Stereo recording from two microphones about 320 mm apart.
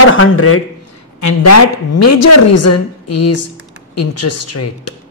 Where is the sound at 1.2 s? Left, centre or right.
Left.